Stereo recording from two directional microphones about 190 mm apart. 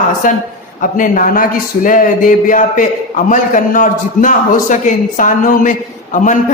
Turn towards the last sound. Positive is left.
turn(degrees=40)  # may be behind; listen again after turning